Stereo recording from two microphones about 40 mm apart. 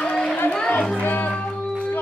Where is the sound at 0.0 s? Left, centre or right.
Centre.